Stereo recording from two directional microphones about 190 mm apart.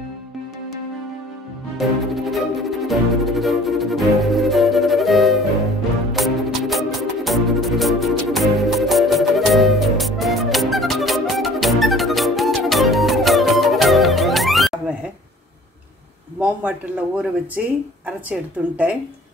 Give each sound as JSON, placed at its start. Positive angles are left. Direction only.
{"t": 1.8, "sound": "music", "side_deg": 0}
{"t": 16.3, "sound": "speech", "side_deg": -5}